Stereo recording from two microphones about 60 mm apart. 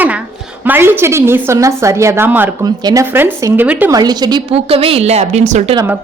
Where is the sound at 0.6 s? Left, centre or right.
Right.